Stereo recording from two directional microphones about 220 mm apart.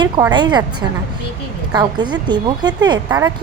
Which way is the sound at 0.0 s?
20° right (ahead or behind).